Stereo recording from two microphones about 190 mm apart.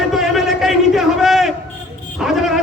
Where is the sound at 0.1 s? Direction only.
Centre (ahead or behind).